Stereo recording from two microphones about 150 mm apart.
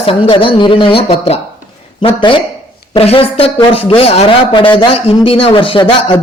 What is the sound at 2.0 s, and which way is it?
Speech, 35° left (ahead or behind).